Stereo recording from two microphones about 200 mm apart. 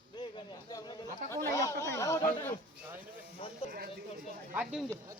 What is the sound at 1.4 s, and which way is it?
Speech, 15° left (ahead or behind).